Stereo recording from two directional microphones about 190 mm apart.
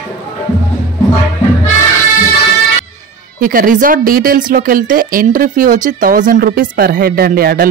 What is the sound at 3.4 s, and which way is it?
Speech, 45° right (ahead or behind).